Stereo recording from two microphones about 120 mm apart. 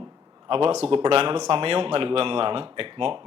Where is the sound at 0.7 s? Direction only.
65° right (ahead or behind).